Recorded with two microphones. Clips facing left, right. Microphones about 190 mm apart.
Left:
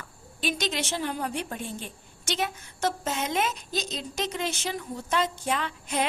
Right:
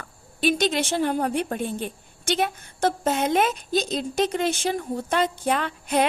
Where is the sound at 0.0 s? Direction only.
55° right (ahead or behind).